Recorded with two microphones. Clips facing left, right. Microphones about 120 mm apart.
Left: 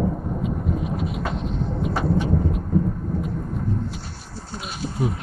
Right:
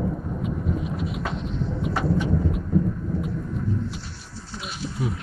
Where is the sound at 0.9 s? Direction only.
45° left (ahead or behind).